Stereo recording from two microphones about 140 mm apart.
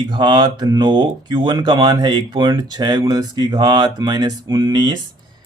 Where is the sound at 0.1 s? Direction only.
35° right (ahead or behind).